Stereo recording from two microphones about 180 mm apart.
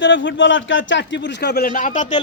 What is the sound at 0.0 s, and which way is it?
A man's voice, 90° left.